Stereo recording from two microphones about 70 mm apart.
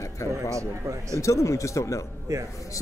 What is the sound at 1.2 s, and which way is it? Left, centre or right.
Speech, left.